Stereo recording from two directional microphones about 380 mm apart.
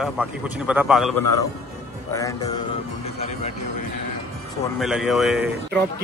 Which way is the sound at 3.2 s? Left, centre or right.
Centre.